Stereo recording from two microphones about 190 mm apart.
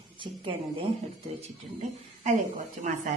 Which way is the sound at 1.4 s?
40° right (ahead or behind).